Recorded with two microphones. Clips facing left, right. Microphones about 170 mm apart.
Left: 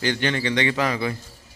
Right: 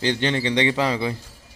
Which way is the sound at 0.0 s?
25° right (ahead or behind).